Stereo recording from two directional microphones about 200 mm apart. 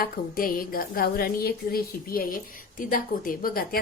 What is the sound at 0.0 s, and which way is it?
A woman's voice, 45° left (ahead or behind).